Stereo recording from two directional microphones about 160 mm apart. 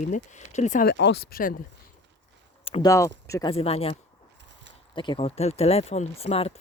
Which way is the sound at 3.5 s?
40° left (ahead or behind).